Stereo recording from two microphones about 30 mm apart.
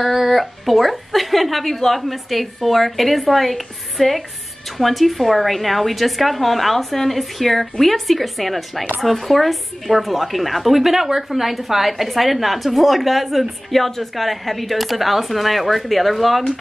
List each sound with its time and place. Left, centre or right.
0.0 s speech: centre